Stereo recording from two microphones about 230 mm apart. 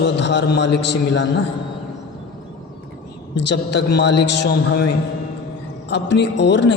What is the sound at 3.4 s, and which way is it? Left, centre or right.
A man's voice, left.